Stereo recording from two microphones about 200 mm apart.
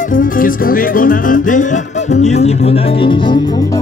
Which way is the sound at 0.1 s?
45° left (ahead or behind).